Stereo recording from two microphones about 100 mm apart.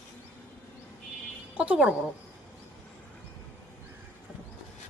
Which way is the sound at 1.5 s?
10° right (ahead or behind).